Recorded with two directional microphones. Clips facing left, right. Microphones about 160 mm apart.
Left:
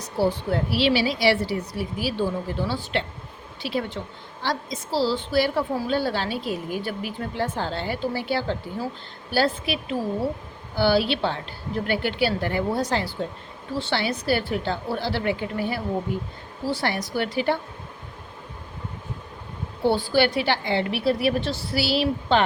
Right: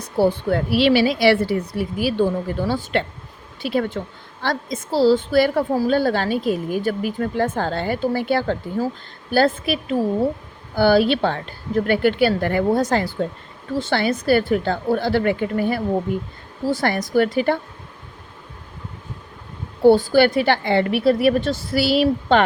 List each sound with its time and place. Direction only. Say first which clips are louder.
0.2 s a woman's voice: right 5 dB; 55° right (ahead or behind)
10.8 s a woman's voice: right 5 dB; 50° right (ahead or behind)
19.9 s a woman's voice: right 7 dB; 45° right (ahead or behind)